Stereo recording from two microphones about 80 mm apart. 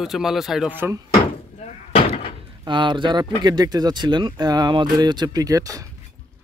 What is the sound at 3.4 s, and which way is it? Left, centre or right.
Speech, right.